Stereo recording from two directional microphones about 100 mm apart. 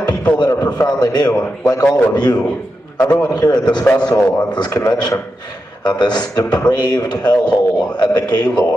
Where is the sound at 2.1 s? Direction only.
40° left (ahead or behind).